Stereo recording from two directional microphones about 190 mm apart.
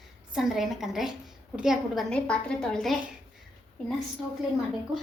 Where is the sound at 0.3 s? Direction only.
Centre (ahead or behind).